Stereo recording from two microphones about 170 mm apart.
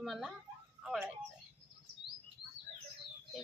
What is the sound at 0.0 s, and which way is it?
Speech, centre (ahead or behind).